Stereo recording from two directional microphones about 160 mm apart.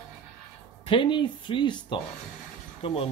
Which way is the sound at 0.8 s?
30° left (ahead or behind).